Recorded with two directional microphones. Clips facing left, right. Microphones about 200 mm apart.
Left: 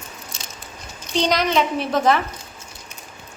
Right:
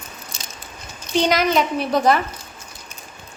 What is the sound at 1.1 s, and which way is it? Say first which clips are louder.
A woman's voice: right 2 dB; 5° right (ahead or behind).